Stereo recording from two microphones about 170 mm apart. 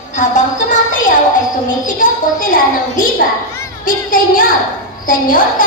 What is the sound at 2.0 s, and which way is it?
A woman's voice, 55° left (ahead or behind).